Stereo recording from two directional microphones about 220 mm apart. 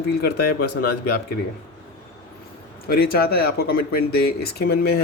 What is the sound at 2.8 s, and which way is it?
Speech, 45° left (ahead or behind).